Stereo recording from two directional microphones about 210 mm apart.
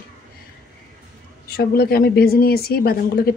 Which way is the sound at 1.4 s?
45° left (ahead or behind).